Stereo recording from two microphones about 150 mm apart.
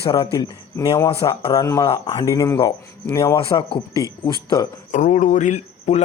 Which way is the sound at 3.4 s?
35° left (ahead or behind).